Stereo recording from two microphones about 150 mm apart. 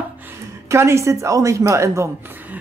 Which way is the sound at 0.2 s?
15° right (ahead or behind).